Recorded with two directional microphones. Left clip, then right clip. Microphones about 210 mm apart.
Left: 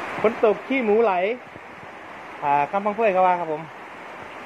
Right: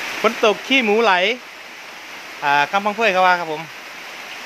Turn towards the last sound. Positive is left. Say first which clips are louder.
# right 3 dB
turn(degrees=-40)  # may be behind; listen again after turning